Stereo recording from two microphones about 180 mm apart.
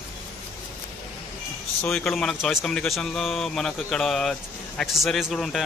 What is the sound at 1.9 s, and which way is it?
Speech, 5° left (ahead or behind).